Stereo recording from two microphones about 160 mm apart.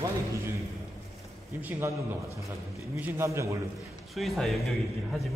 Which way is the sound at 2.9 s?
15° right (ahead or behind).